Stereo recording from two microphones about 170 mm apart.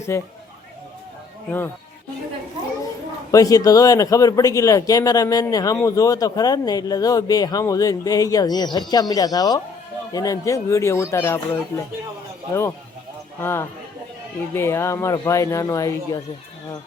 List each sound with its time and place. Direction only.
0.1 s speech: 15° left (ahead or behind)
1.5 s speech: 10° left (ahead or behind)
3.3 s speech: 20° left (ahead or behind)
13.4 s speech: 15° left (ahead or behind)